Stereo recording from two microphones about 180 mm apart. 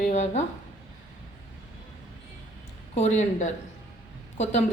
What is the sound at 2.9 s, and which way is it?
Speech, 40° left (ahead or behind).